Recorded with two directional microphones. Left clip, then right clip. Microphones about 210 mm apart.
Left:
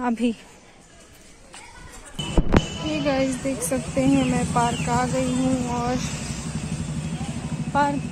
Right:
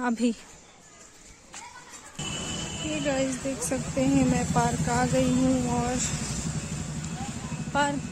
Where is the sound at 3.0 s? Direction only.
10° right (ahead or behind).